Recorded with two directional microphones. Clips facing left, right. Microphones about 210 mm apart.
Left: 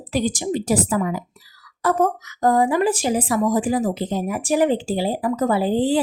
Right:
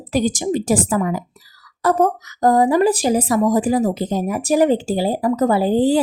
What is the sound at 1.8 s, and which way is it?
A woman's voice, 35° right (ahead or behind).